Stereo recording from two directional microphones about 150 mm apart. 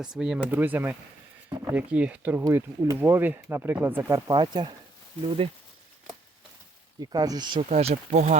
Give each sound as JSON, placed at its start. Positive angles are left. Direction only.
{"t": 0.0, "sound": "speech", "side_deg": -5}
{"t": 2.4, "sound": "speech", "side_deg": -20}
{"t": 4.3, "sound": "speech", "side_deg": -30}
{"t": 7.0, "sound": "speech", "side_deg": -25}
{"t": 7.7, "sound": "speech", "side_deg": -45}